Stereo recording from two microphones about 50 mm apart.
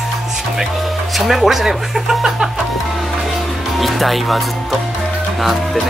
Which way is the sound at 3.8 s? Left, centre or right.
Centre.